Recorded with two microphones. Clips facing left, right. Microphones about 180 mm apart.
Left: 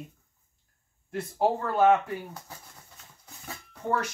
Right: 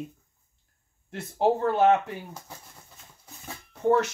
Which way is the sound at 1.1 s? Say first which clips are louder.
Right 2 dB; 25° right (ahead or behind).